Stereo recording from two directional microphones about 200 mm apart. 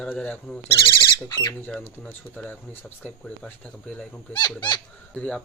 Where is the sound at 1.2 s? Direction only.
20° left (ahead or behind).